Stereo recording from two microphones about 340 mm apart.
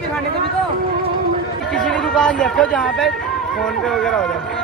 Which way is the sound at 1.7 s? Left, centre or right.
Centre.